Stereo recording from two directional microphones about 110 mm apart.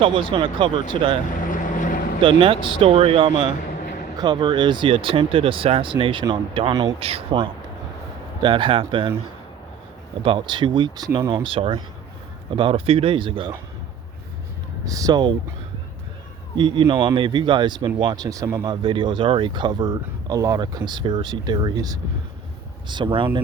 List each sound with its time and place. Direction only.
0.0 s speech: 55° right (ahead or behind)
2.2 s speech: 50° right (ahead or behind)
4.2 s speech: 40° right (ahead or behind)
10.2 s speech: 45° right (ahead or behind)
11.4 s speech: 55° right (ahead or behind)
14.8 s speech: 35° right (ahead or behind)
16.6 s speech: 45° right (ahead or behind)
18.9 s speech: 50° right (ahead or behind)
22.9 s speech: 45° right (ahead or behind)